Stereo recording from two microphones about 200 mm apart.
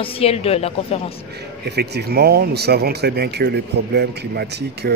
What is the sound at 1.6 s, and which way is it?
A man's voice, 55° right (ahead or behind).